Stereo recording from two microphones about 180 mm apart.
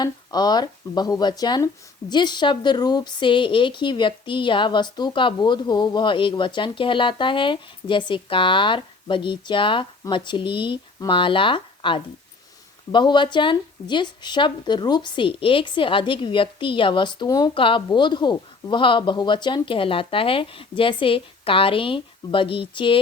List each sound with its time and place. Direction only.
0.0 s speech: 20° left (ahead or behind)